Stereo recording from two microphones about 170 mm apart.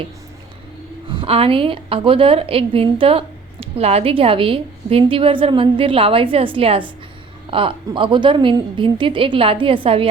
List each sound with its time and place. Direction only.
1.1 s a woman's voice: 35° right (ahead or behind)